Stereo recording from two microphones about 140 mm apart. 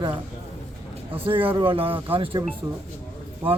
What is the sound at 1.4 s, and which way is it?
Speech, 40° right (ahead or behind).